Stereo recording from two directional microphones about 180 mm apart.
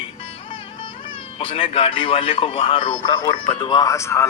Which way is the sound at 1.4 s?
30° left (ahead or behind).